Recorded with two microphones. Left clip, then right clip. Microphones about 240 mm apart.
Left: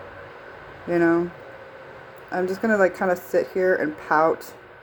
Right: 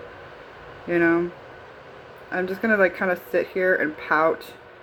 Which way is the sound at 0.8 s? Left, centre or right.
Left.